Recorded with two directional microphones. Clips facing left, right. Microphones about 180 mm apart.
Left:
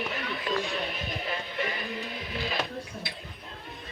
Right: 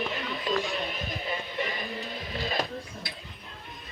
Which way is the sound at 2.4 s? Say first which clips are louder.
Right 1 dB; 35° right (ahead or behind).